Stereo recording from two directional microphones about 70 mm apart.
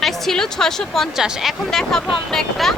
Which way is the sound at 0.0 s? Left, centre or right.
Centre.